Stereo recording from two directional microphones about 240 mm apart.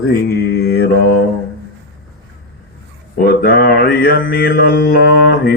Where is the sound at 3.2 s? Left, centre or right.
Left.